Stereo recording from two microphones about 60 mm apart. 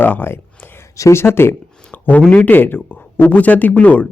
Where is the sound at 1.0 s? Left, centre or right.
Left.